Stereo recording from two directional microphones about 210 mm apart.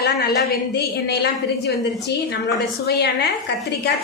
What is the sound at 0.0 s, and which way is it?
A woman's voice, 50° left (ahead or behind).